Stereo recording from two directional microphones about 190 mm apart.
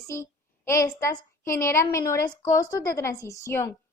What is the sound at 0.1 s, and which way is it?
Speech, 15° left (ahead or behind).